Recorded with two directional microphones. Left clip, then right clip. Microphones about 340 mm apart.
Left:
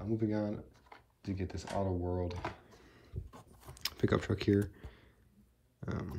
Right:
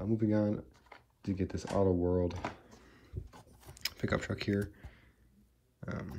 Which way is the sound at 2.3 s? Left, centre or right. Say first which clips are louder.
Right 1 dB; right.